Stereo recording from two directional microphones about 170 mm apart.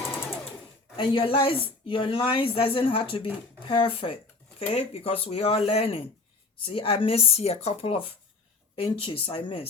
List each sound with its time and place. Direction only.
0.9 s a woman's voice: 30° left (ahead or behind)